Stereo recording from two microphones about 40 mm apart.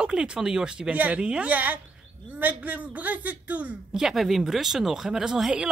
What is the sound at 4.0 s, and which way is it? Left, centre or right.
Speech, centre.